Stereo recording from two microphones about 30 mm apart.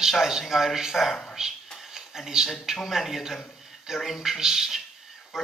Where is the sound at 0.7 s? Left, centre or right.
Centre.